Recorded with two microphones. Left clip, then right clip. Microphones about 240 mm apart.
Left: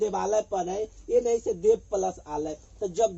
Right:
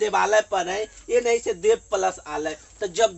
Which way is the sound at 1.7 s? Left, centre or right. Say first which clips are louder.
Right 3 dB; right.